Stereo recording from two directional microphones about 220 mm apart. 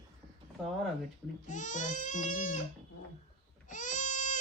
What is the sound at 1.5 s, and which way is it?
Baby cry, 35° left (ahead or behind).